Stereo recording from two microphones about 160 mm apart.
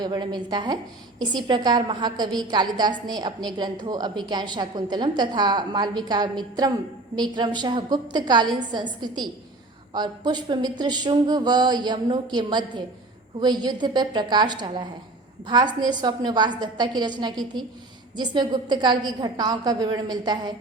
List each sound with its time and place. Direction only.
0.0 s a woman's voice: 25° right (ahead or behind)